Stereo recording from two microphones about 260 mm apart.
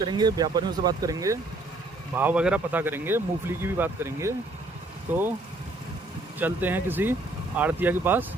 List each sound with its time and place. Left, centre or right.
0.0 s speech: centre
6.4 s speech: centre